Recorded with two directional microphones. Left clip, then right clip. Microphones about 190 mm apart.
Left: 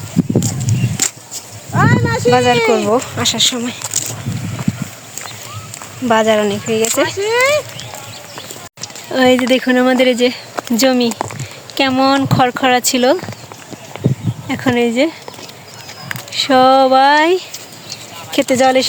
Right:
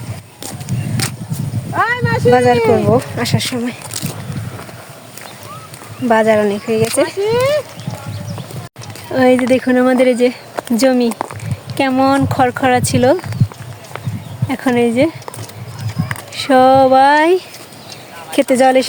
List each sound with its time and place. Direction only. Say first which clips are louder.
0.4 s a sound: left 4 dB; centre (ahead or behind)
1.7 s vehicle: even; 15° left (ahead or behind)
2.4 s speech: right 1 dB; 10° left (ahead or behind)
6.1 s speech: right 1 dB; centre (ahead or behind)
7.2 s speech: left 2 dB; 25° left (ahead or behind)
9.1 s speech: even; centre (ahead or behind)
10.5 s a sound: even; 30° left (ahead or behind)
10.8 s speech: even; centre (ahead or behind)
13.9 s clip-clop: left 7 dB; 15° right (ahead or behind)
14.4 s speech: right 1 dB; centre (ahead or behind)
16.3 s speech: even; 5° right (ahead or behind)